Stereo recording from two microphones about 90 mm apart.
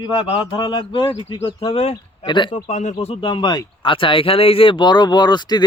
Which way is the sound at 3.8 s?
70° left (ahead or behind).